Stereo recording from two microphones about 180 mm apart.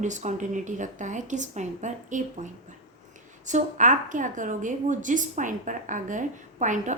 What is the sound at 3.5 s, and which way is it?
A woman's voice, 45° right (ahead or behind).